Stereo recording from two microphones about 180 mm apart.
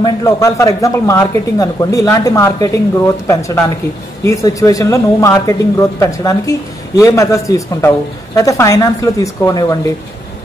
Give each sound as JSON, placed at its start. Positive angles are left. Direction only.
{"t": 0.0, "sound": "speech", "side_deg": 15}